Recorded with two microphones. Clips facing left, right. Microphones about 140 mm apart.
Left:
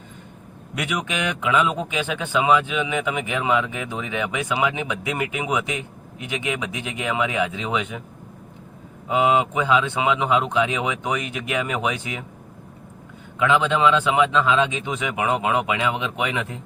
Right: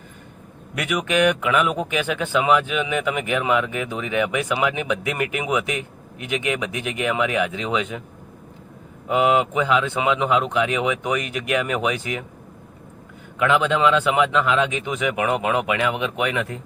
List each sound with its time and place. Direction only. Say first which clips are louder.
0.8 s speech: right 6 dB; 20° left (ahead or behind)
9.3 s speech: even; 20° left (ahead or behind)
13.5 s speech: even; 20° left (ahead or behind)